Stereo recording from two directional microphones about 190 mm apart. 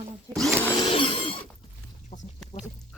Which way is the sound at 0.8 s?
25° left (ahead or behind).